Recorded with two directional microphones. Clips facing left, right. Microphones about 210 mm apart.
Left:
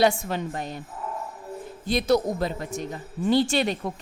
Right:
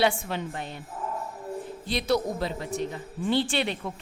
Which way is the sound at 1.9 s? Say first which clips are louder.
Left 4 dB; 45° left (ahead or behind).